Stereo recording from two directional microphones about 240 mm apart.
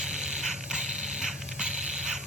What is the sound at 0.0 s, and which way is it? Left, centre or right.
Mechanisms, centre.